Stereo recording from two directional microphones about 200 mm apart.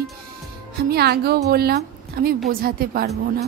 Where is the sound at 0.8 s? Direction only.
55° right (ahead or behind).